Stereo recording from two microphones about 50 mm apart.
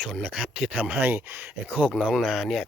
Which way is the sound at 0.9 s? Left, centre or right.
Right.